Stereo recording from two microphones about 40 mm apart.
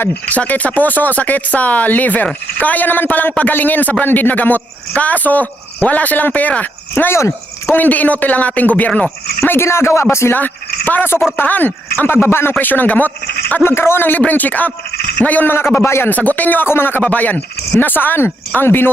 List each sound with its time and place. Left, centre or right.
0.1 s a man's voice: left
7.8 s a man's voice: left
9.4 s speech: left
10.3 s speech: left
11.9 s speech: left
12.5 s speech: left
13.7 s a man's voice: left
14.2 s a man's voice: left
15.4 s a man's voice: left
16.0 s speech: left
16.6 s speech: left
17.0 s speech: left